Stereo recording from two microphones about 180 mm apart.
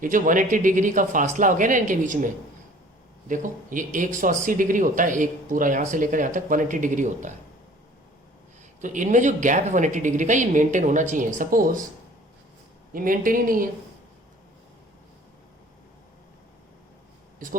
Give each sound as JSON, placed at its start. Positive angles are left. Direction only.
{"t": 0.0, "sound": "speech", "side_deg": -45}
{"t": 8.8, "sound": "speech", "side_deg": -45}
{"t": 12.9, "sound": "speech", "side_deg": -50}